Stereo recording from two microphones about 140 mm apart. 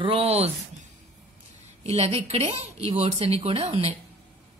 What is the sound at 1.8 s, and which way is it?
Speech, 45° right (ahead or behind).